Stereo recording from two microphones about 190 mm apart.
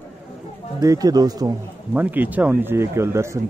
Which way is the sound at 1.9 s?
10° right (ahead or behind).